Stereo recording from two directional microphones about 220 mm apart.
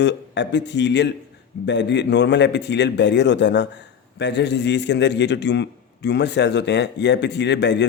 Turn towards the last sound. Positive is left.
turn(degrees=50)  # may be behind; listen again after turning